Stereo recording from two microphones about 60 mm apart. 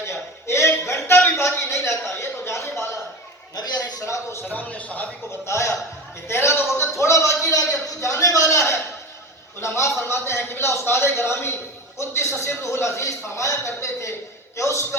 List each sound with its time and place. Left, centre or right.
0.0 s a sound: left
4.0 s a man's voice: left
4.4 s a man's voice: left
5.5 s a man's voice: left